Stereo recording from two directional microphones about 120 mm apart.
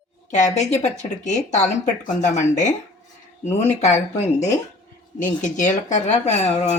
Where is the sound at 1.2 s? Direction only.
80° left.